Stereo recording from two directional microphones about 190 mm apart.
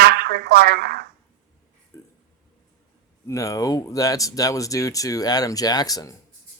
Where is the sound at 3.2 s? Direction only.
15° left (ahead or behind).